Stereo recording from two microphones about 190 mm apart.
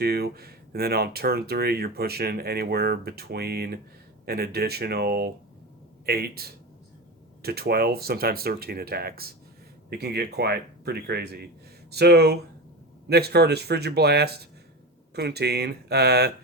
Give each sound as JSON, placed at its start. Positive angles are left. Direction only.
{"t": 0.0, "sound": "speech", "side_deg": -55}